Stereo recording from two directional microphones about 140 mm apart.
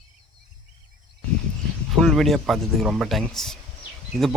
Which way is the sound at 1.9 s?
Centre (ahead or behind).